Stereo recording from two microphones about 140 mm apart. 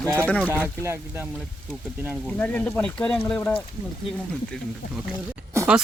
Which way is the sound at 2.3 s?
10° left (ahead or behind).